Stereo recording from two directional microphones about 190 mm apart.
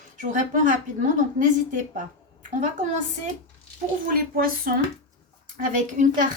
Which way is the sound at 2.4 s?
40° right (ahead or behind).